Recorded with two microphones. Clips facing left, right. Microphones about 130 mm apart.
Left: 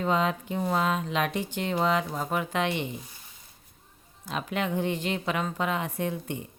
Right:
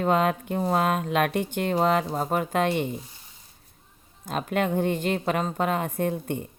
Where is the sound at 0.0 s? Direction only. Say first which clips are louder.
Right 3 dB; 50° right (ahead or behind).